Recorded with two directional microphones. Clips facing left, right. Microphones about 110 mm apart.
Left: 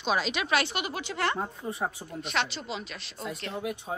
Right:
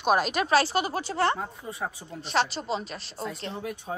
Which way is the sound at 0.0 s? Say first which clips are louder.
Right 5 dB; 50° right (ahead or behind).